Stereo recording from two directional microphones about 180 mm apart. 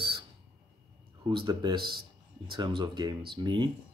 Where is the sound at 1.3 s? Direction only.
25° right (ahead or behind).